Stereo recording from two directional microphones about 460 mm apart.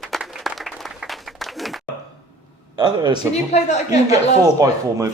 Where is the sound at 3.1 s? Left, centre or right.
Centre.